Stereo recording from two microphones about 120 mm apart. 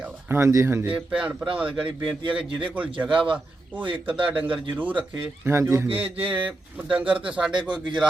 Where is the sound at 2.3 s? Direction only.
10° right (ahead or behind).